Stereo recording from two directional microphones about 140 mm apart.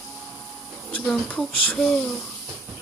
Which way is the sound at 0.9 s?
5° left (ahead or behind).